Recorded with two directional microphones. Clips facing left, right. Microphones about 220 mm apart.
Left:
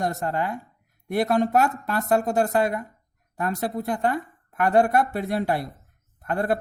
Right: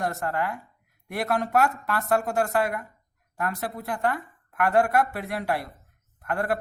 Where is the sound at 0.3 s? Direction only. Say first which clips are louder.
Left 2 dB; 25° left (ahead or behind).